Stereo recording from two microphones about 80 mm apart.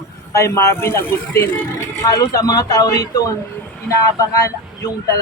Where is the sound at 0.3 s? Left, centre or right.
Left.